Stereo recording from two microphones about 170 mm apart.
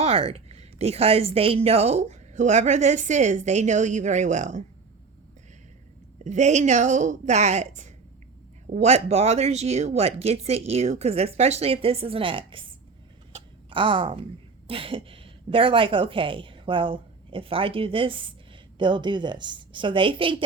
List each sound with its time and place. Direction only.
0.0 s a woman's voice: 35° right (ahead or behind)
6.2 s a woman's voice: 45° right (ahead or behind)
13.3 s a sound: 30° right (ahead or behind)
14.7 s a woman's voice: 30° right (ahead or behind)